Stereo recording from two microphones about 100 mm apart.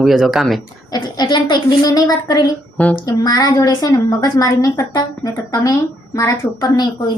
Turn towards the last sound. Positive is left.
turn(degrees=45)  # may be behind; listen again after turning